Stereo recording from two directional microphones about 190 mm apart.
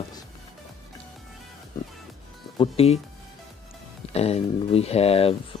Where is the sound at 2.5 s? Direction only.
30° left (ahead or behind).